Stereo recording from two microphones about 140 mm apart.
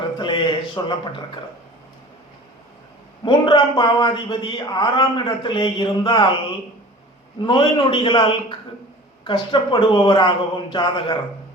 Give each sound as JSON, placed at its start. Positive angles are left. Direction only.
{"t": 0.2, "sound": "a man's voice", "side_deg": 35}
{"t": 3.2, "sound": "a man's voice", "side_deg": 35}
{"t": 7.4, "sound": "a man's voice", "side_deg": 40}